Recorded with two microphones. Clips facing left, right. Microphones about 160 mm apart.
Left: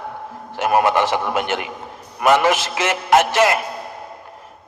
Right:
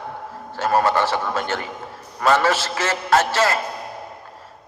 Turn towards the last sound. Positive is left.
turn(degrees=15)  # may be behind; listen again after turning